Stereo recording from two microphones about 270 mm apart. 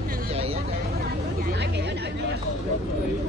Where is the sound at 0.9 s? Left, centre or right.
Right.